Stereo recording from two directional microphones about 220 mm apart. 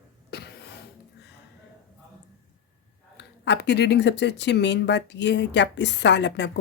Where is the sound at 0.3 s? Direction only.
45° left (ahead or behind).